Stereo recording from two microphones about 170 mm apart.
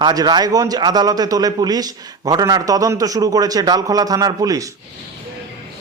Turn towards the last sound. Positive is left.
turn(degrees=-20)  # may be behind; listen again after turning